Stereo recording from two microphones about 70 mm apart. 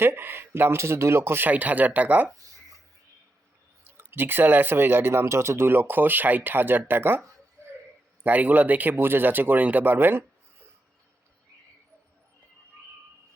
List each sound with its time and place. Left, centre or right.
0.0 s speech: right
1.5 s speech: right
3.8 s speech: right
8.2 s speech: right